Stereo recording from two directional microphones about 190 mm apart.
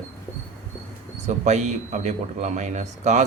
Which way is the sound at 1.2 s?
35° right (ahead or behind).